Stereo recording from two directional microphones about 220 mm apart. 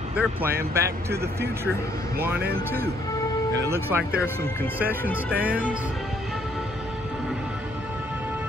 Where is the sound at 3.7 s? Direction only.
10° right (ahead or behind).